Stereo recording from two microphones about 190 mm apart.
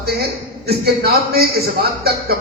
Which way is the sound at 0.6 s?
55° right (ahead or behind).